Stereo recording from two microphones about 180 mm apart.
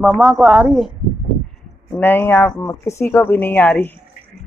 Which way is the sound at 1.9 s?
10° left (ahead or behind).